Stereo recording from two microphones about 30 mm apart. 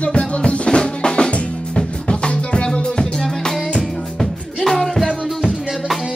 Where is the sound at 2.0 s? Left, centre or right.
Left.